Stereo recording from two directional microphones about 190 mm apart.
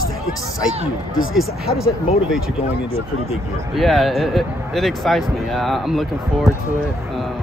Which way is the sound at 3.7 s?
Centre (ahead or behind).